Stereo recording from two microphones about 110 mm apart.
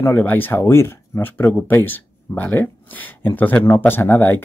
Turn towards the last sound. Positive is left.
turn(degrees=20)  # may be behind; listen again after turning